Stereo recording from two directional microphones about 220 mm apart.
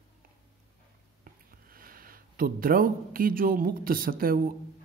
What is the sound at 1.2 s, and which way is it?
Speech, 40° right (ahead or behind).